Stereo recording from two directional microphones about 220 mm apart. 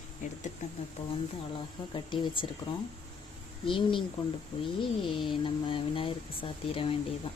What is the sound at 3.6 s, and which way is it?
Speech, 20° left (ahead or behind).